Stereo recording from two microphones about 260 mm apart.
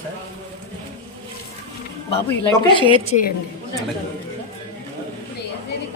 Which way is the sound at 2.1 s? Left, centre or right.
Centre.